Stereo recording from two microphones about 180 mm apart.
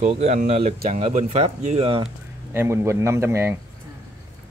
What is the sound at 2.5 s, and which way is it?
A woman's voice, 15° right (ahead or behind).